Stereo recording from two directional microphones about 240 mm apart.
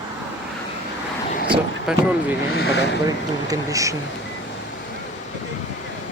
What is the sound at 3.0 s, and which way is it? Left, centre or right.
Speech, centre.